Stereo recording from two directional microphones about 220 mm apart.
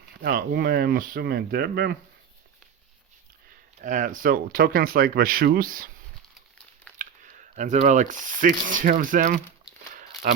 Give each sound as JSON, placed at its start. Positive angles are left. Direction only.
{"t": 0.2, "sound": "speech", "side_deg": -40}
{"t": 3.8, "sound": "speech", "side_deg": -35}
{"t": 7.0, "sound": "speech", "side_deg": -35}